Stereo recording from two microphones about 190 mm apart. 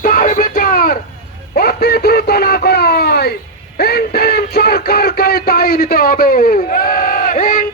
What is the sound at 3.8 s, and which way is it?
Music, 55° left (ahead or behind).